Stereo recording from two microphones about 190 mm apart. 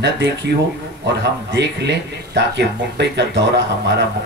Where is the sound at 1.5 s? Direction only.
65° right (ahead or behind).